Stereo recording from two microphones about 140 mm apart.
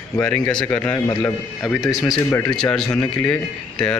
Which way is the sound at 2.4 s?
5° left (ahead or behind).